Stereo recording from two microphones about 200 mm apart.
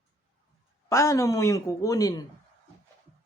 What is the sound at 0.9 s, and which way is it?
Speech, 15° left (ahead or behind).